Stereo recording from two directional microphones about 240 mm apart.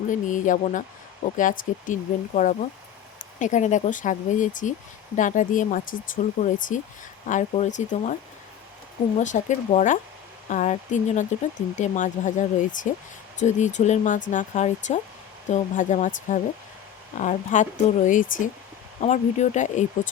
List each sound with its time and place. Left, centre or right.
0.1 s speech: left
9.1 s speech: left